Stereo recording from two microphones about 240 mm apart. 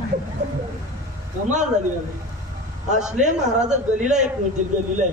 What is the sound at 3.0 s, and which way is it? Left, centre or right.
A man's voice, right.